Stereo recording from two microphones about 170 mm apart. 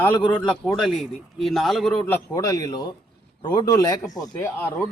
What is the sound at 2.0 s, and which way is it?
Speech, 15° left (ahead or behind).